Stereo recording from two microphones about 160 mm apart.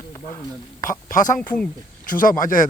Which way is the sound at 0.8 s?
55° left (ahead or behind).